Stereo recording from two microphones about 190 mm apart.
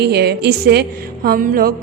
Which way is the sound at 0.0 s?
60° right (ahead or behind).